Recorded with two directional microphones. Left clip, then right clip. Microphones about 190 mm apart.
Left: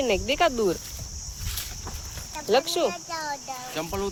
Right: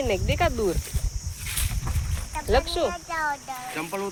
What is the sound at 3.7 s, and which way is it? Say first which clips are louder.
Speech: left 1 dB; 45° left (ahead or behind).